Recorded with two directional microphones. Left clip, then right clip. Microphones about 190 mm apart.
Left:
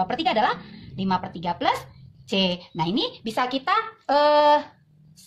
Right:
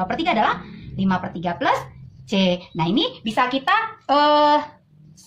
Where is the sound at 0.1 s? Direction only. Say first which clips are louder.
Right 2 dB; 45° left (ahead or behind).